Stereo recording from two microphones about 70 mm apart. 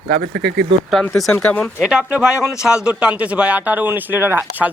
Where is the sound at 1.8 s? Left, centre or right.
Centre.